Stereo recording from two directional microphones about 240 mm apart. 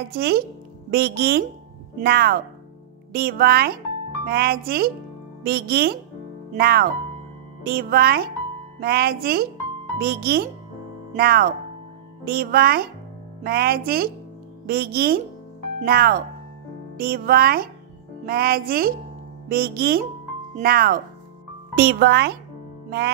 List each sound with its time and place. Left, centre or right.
0.1 s a child's voice: right
22.8 s music: right